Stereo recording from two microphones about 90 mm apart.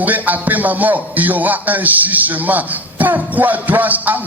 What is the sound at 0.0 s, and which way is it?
Speech, 20° right (ahead or behind).